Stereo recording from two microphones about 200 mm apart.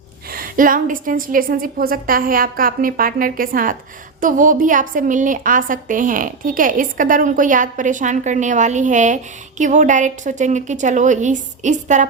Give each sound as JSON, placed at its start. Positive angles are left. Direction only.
{"t": 0.3, "sound": "a woman's voice", "side_deg": -45}